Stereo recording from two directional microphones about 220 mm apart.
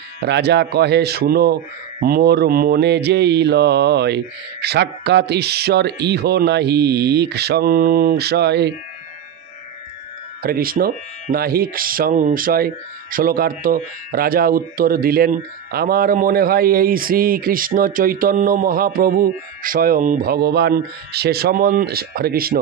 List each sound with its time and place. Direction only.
0.2 s mantra: 50° right (ahead or behind)
10.4 s speech: 40° right (ahead or behind)